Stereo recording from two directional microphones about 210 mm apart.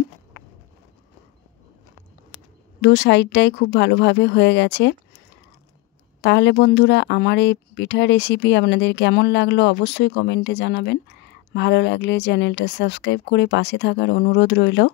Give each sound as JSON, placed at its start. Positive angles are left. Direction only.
{"t": 2.3, "sound": "speech", "side_deg": 55}
{"t": 6.2, "sound": "speech", "side_deg": 55}